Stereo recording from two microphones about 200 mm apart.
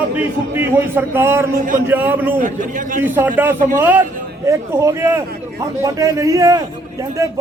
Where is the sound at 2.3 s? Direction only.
40° right (ahead or behind).